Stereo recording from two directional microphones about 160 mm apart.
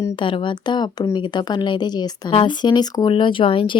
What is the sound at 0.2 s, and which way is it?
Speech, 30° left (ahead or behind).